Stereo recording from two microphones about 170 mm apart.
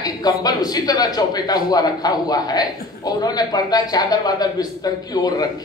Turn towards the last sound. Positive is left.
turn(degrees=25)  # may be behind; listen again after turning